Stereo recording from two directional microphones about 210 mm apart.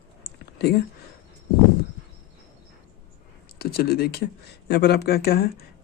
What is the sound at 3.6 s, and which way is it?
Speech, 45° left (ahead or behind).